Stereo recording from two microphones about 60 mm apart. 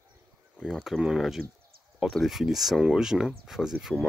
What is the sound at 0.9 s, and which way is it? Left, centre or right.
Speech, centre.